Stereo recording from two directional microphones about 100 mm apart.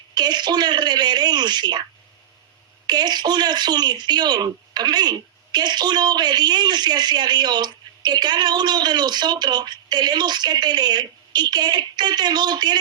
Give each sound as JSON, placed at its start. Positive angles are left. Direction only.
{"t": 0.1, "sound": "speech", "side_deg": -45}
{"t": 2.8, "sound": "speech", "side_deg": -45}